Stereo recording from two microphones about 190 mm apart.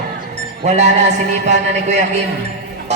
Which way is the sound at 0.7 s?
35° right (ahead or behind).